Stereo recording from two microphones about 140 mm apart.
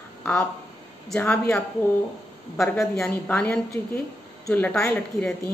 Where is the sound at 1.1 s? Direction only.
10° left (ahead or behind).